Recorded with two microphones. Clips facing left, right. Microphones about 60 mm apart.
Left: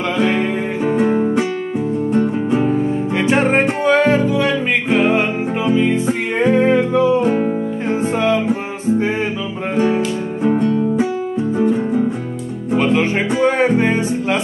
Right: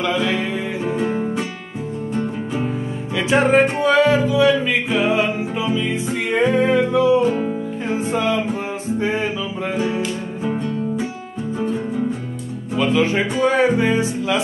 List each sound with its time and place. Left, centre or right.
0.2 s music: left
1.0 s music: centre
3.8 s music: left
6.0 s music: left
9.8 s music: left
12.7 s music: left